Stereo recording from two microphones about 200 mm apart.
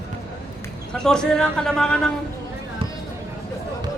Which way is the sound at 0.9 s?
5° left (ahead or behind).